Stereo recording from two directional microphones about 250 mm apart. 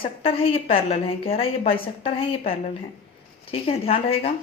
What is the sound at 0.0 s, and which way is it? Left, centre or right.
A woman's voice, left.